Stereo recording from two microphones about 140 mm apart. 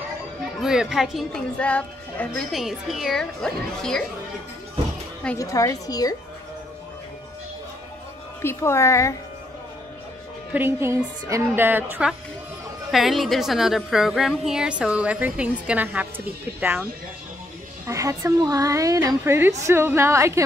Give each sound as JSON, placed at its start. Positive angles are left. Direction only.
{"t": 0.6, "sound": "a woman's voice", "side_deg": -5}
{"t": 2.5, "sound": "a woman's voice", "side_deg": 0}
{"t": 5.4, "sound": "a woman's voice", "side_deg": 25}
{"t": 8.4, "sound": "a woman's voice", "side_deg": 20}
{"t": 10.5, "sound": "a woman's voice", "side_deg": -15}
{"t": 12.9, "sound": "a woman's voice", "side_deg": 0}
{"t": 17.8, "sound": "a woman's voice", "side_deg": -20}